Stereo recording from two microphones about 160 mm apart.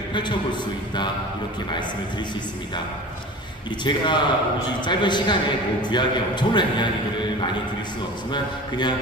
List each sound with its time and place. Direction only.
0.1 s a man's voice: 30° left (ahead or behind)
3.8 s a man's voice: 30° left (ahead or behind)